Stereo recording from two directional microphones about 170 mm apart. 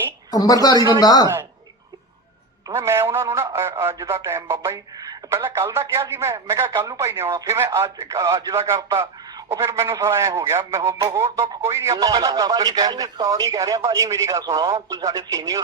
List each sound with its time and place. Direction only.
0.3 s a woman's voice: 20° left (ahead or behind)
2.6 s a man's voice: 15° right (ahead or behind)